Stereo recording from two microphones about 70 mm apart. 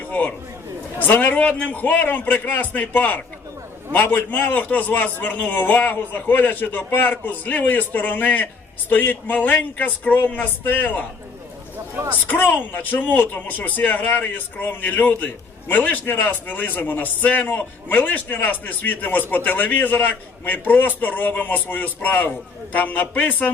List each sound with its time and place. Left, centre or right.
0.1 s a man's voice: left
12.3 s a man's voice: left